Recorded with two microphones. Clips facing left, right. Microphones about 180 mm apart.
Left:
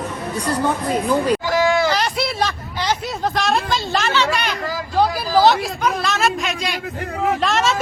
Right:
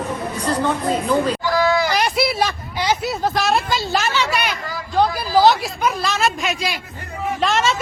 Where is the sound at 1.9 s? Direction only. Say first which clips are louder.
Right 1 dB; 10° right (ahead or behind).